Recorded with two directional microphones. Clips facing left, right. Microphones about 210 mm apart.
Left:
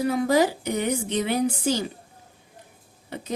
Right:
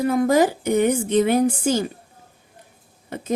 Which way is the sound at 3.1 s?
50° right (ahead or behind).